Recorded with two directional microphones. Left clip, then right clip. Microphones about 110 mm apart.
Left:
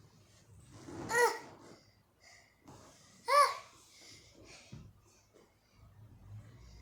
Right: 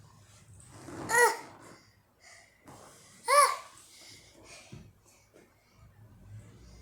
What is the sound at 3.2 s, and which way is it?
Babbling, 20° left (ahead or behind).